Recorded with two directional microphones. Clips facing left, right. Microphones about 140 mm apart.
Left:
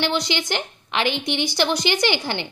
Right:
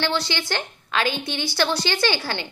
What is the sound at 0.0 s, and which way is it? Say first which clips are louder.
A woman's voice: left 2 dB; 15° left (ahead or behind).